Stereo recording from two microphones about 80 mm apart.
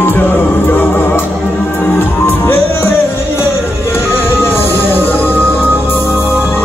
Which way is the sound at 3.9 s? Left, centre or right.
Left.